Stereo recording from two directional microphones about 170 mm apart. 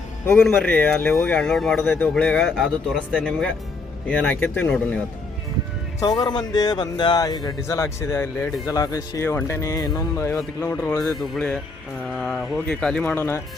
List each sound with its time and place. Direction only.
0.4 s speech: 5° left (ahead or behind)
6.0 s speech: 25° left (ahead or behind)
11.2 s speech: 5° left (ahead or behind)